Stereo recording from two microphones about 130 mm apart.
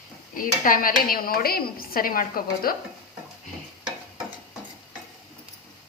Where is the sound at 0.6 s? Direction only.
90° left.